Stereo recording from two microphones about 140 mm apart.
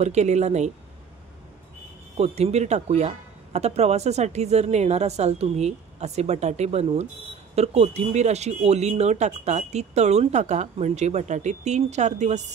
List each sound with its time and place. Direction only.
0.0 s speech: 55° right (ahead or behind)
2.1 s speech: 50° right (ahead or behind)